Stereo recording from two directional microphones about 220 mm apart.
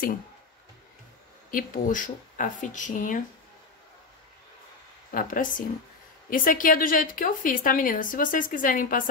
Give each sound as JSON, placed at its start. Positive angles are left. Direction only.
{"t": 1.5, "sound": "speech", "side_deg": 40}
{"t": 5.1, "sound": "speech", "side_deg": 35}